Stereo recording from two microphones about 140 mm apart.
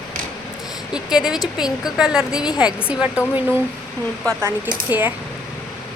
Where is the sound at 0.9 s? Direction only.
5° right (ahead or behind).